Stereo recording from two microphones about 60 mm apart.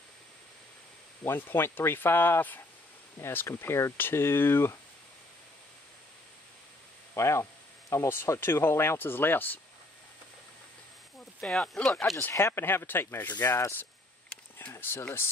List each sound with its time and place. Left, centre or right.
1.2 s speech: left
3.2 s speech: left
7.2 s speech: left
11.4 s speech: centre
12.4 s speech: left
14.7 s speech: left